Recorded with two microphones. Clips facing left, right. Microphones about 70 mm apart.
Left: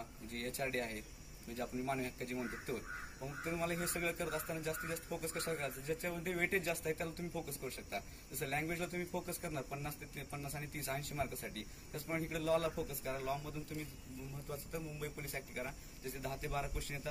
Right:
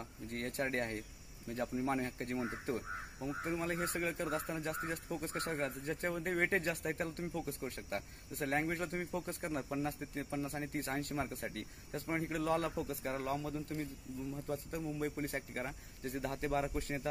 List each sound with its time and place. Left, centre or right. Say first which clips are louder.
0.3 s speech: right 3 dB; right
4.5 s speech: right 2 dB; right
9.9 s speech: right 8 dB; right